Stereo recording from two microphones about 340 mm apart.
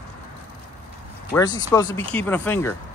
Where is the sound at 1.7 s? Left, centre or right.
Centre.